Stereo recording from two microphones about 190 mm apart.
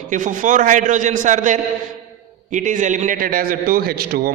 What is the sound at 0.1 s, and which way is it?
A man's voice, 45° right (ahead or behind).